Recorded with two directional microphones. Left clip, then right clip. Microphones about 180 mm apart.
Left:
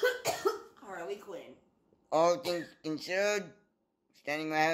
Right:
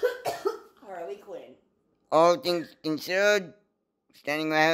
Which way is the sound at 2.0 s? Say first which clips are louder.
Right 7 dB; 35° right (ahead or behind).